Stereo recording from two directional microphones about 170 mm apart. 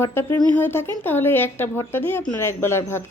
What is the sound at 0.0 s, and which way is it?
A woman's voice, 15° left (ahead or behind).